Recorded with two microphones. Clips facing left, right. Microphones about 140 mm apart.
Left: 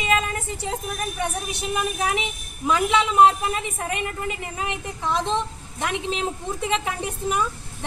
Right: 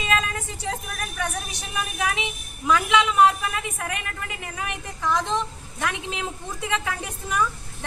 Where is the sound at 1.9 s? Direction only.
25° left (ahead or behind).